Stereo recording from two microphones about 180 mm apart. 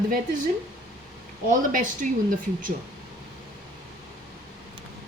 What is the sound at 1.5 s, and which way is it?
Speech, 50° right (ahead or behind).